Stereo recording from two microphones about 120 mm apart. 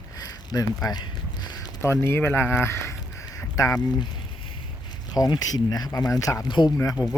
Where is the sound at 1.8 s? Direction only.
20° left (ahead or behind).